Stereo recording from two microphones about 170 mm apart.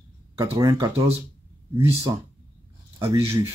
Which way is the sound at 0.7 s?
30° right (ahead or behind).